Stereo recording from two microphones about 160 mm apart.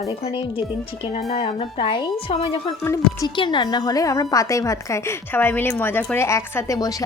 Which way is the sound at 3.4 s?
30° left (ahead or behind).